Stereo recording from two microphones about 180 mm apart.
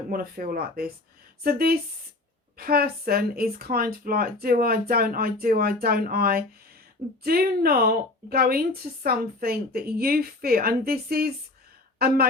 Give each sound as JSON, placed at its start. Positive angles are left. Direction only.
{"t": 0.1, "sound": "speech", "side_deg": -55}